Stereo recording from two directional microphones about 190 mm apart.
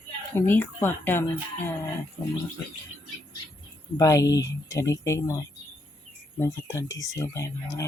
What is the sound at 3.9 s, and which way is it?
Speech, 15° left (ahead or behind).